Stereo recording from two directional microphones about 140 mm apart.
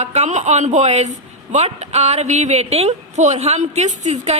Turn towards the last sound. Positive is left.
turn(degrees=-55)  # may be behind; listen again after turning